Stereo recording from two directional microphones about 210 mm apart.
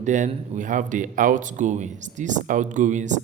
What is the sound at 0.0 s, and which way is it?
Speech, 35° right (ahead or behind).